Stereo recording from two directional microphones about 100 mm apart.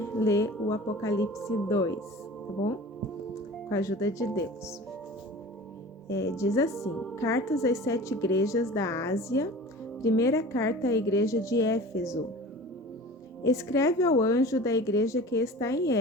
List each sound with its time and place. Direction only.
0.2 s a woman's voice: 30° left (ahead or behind)
3.7 s a woman's voice: 30° left (ahead or behind)
6.1 s a woman's voice: 30° left (ahead or behind)
13.4 s a woman's voice: 30° left (ahead or behind)